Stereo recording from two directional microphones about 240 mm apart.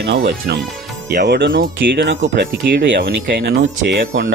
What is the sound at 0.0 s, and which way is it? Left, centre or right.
Speech, right.